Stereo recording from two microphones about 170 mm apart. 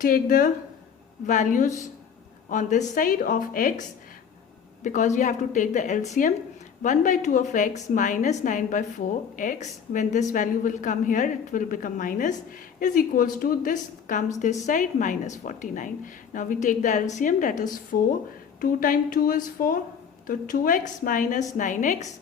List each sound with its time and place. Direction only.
0.0 s a woman's voice: 55° left (ahead or behind)